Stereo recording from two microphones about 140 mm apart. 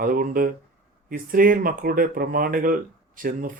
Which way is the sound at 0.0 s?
90° right.